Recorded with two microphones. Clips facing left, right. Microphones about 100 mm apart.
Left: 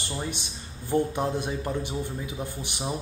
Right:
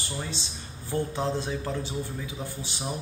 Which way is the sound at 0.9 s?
15° left (ahead or behind).